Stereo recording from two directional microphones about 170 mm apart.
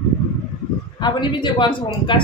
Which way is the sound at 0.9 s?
25° left (ahead or behind).